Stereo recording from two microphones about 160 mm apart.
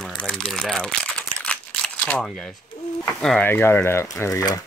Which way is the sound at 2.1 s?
5° left (ahead or behind).